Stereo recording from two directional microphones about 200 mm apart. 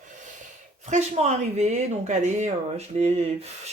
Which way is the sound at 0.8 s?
35° right (ahead or behind).